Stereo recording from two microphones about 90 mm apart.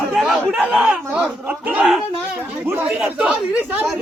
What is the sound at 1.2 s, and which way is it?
Speech, 20° right (ahead or behind).